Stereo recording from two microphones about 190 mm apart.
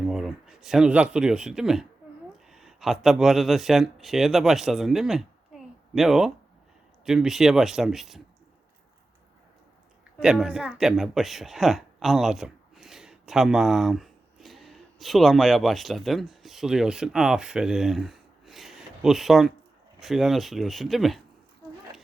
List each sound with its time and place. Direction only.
0.0 s speech: centre (ahead or behind)
10.2 s speech: centre (ahead or behind)